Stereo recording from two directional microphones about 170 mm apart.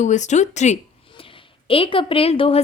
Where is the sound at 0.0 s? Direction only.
45° left (ahead or behind).